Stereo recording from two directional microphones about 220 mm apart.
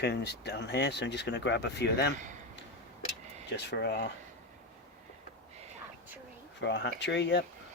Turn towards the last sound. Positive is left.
turn(degrees=50)  # may be behind; listen again after turning